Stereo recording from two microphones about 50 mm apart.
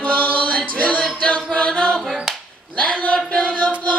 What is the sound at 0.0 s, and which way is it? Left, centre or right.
Chant, left.